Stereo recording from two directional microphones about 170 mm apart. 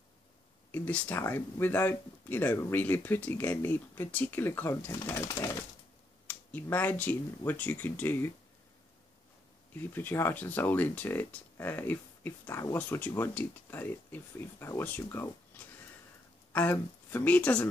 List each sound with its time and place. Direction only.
0.7 s speech: 10° left (ahead or behind)
9.9 s speech: 10° left (ahead or behind)